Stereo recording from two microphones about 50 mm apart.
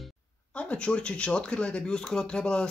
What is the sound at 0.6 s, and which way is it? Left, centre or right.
Speech, left.